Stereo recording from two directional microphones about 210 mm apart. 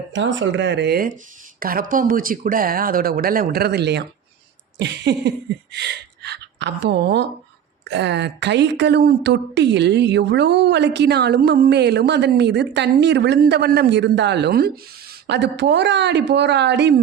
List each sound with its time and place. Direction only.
0.1 s speech: 60° right (ahead or behind)